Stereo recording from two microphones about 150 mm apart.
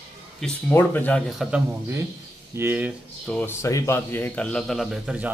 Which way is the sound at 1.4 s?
5° right (ahead or behind).